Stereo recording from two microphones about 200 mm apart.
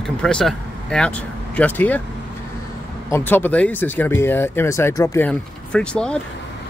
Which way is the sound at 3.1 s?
10° left (ahead or behind).